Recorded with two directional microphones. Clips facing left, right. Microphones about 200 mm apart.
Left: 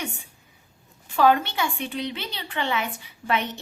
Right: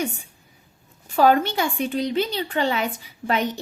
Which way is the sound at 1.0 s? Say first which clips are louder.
Right 2 dB; 40° right (ahead or behind).